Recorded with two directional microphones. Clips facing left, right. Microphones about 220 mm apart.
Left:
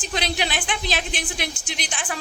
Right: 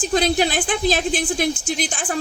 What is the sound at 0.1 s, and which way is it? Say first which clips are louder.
A woman's voice: right 7 dB; 45° right (ahead or behind).